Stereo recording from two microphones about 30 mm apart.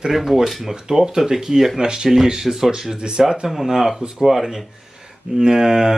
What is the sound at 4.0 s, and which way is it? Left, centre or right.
Speech, right.